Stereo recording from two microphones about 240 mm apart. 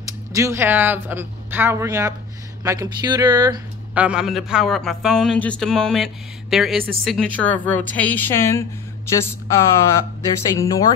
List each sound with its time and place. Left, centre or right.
0.0 s speech: centre
3.9 s a man's voice: centre